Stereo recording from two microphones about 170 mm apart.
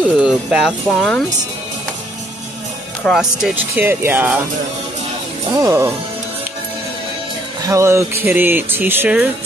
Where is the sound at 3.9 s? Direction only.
15° right (ahead or behind).